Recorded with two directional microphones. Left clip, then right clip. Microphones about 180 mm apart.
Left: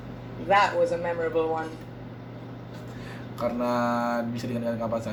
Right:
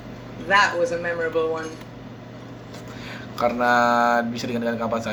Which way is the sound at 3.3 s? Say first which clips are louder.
Right 8 dB; 10° right (ahead or behind).